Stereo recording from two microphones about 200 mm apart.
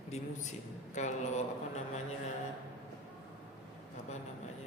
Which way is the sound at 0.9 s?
35° left (ahead or behind).